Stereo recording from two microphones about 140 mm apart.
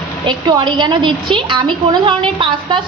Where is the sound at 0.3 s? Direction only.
35° right (ahead or behind).